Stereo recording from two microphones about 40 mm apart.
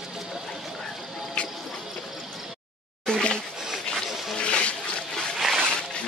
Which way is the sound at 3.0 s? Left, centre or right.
Left.